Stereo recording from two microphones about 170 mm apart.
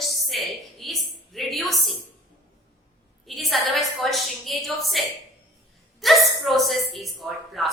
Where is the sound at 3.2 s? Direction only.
Centre (ahead or behind).